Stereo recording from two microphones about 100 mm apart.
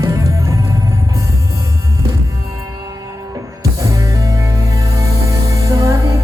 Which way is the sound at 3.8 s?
35° right (ahead or behind).